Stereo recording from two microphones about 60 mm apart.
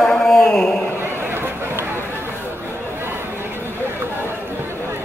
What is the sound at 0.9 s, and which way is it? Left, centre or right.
Run, right.